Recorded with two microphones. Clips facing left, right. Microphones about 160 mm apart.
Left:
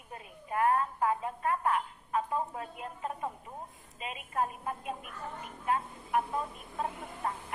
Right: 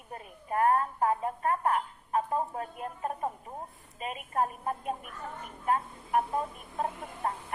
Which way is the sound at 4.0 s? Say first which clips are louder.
Right 3 dB; 40° right (ahead or behind).